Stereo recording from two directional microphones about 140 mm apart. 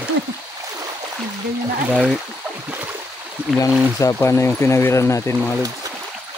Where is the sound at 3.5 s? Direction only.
20° left (ahead or behind).